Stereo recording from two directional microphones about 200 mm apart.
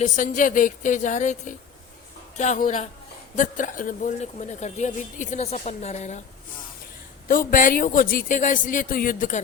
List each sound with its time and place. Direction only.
0.0 s speech: 40° left (ahead or behind)
7.3 s speech: 40° left (ahead or behind)